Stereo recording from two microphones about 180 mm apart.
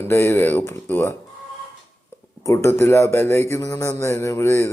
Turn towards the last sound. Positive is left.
turn(degrees=15)  # may be behind; listen again after turning